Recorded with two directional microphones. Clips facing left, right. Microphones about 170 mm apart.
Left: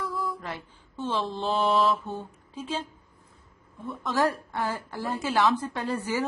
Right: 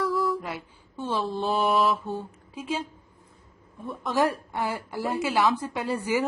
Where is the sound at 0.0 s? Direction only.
90° right.